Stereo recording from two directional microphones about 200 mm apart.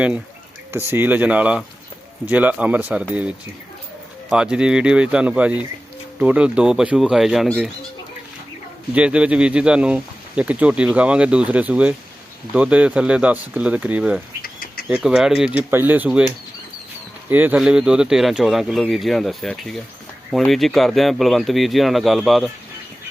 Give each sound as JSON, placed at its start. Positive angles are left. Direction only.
{"t": 0.9, "sound": "speech", "side_deg": -10}
{"t": 8.9, "sound": "speech", "side_deg": -5}
{"t": 14.4, "sound": "bird", "side_deg": 45}
{"t": 14.8, "sound": "speech", "side_deg": -5}
{"t": 17.2, "sound": "speech", "side_deg": -10}